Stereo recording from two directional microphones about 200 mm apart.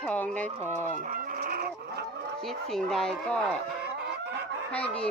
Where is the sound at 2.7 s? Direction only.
Centre (ahead or behind).